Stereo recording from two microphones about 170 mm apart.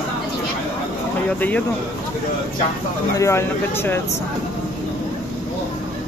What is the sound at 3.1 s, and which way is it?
Speech, 15° left (ahead or behind).